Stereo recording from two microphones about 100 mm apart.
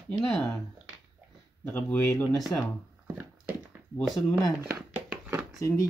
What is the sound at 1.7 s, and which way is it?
Speech, 20° left (ahead or behind).